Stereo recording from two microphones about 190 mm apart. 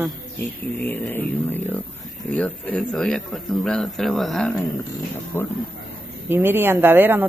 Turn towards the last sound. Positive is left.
turn(degrees=-10)  # may be behind; listen again after turning